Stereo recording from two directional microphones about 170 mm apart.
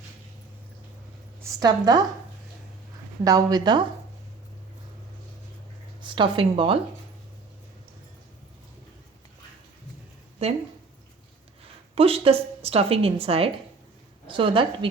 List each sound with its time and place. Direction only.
1.5 s a woman's voice: 25° right (ahead or behind)
3.2 s a woman's voice: 20° right (ahead or behind)
6.0 s speech: 30° right (ahead or behind)
10.4 s speech: 40° right (ahead or behind)
11.9 s a woman's voice: 35° right (ahead or behind)